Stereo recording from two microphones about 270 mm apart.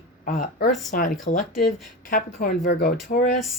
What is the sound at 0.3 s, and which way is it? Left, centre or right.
Speech, left.